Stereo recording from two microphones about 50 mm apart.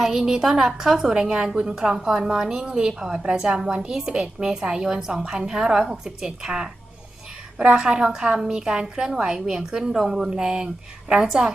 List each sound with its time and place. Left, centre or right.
0.0 s a woman's voice: centre